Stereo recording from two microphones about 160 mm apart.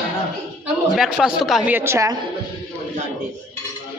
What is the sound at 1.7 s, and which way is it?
Speech, 15° right (ahead or behind).